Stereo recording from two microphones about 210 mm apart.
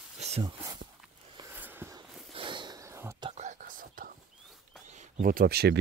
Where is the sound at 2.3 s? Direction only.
25° right (ahead or behind).